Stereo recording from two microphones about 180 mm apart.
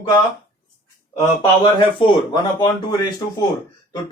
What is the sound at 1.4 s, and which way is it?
A man's voice, 25° left (ahead or behind).